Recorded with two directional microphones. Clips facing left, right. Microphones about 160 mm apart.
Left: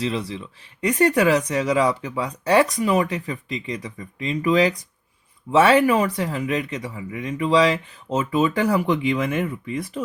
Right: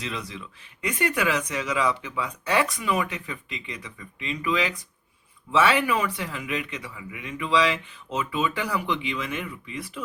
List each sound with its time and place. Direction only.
0.0 s speech: 30° left (ahead or behind)